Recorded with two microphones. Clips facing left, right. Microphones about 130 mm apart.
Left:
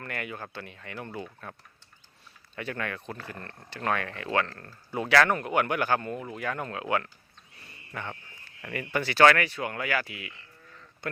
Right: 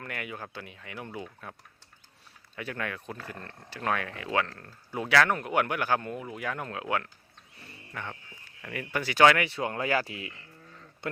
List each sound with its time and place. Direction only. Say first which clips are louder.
0.0 s speech: left 1 dB; 5° right (ahead or behind)
2.6 s speech: left 1 dB; 5° right (ahead or behind); by 10.3 s 30° right (ahead or behind)